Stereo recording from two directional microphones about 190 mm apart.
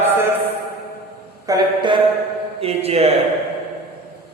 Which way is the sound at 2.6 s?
30° right (ahead or behind).